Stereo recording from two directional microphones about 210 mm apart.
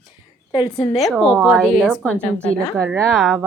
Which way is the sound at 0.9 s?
Centre (ahead or behind).